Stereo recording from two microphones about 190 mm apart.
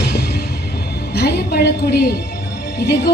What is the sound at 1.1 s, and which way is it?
A woman's voice, 60° left (ahead or behind).